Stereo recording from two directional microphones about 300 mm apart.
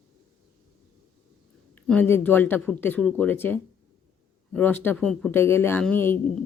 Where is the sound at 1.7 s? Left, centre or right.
Centre.